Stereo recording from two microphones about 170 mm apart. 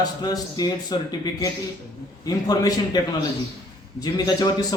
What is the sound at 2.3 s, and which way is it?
A man's voice, 20° left (ahead or behind).